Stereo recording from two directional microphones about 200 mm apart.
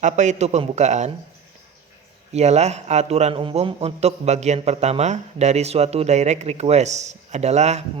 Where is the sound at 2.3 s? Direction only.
35° right (ahead or behind).